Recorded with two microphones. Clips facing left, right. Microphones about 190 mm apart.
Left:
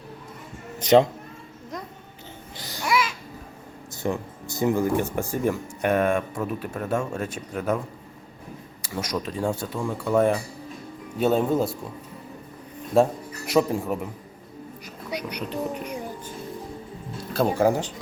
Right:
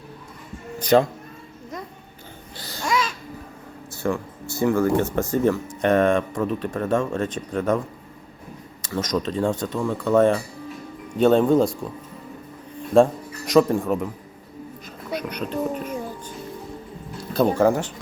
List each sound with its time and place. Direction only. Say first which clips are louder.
0.8 s speech: left 1 dB; 20° left (ahead or behind)
2.6 s babbling: even; 15° left (ahead or behind)
4.0 s speech: right 2 dB; 20° left (ahead or behind)
8.8 s speech: right 5 dB; 10° left (ahead or behind)
13.5 s speech: right 4 dB; 10° left (ahead or behind)
15.1 s a sound: right 3 dB; 10° left (ahead or behind)
15.7 s speech: right 3 dB; 15° left (ahead or behind)
17.3 s speech: right 3 dB; 15° left (ahead or behind)